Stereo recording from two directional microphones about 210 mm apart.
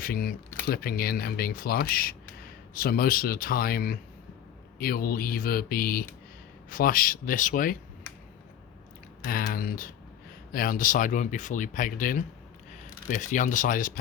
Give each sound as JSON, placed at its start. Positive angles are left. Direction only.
{"t": 0.0, "sound": "speech", "side_deg": 45}
{"t": 9.2, "sound": "speech", "side_deg": 45}